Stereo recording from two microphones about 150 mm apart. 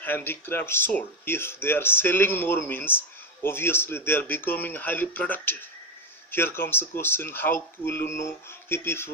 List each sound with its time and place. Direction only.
0.0 s speech: 15° left (ahead or behind)